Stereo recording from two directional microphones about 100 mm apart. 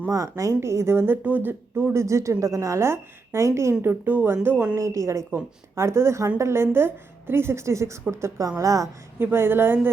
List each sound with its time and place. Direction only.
0.1 s speech: 35° right (ahead or behind); by 4.8 s 15° right (ahead or behind)
4.8 s a woman's voice: 30° right (ahead or behind)
9.2 s speech: 25° right (ahead or behind)